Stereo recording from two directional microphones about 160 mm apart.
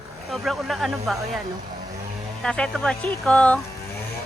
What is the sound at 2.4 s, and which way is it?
Speech, 5° left (ahead or behind).